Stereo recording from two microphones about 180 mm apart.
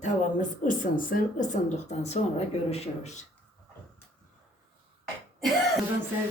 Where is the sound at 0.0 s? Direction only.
45° left (ahead or behind).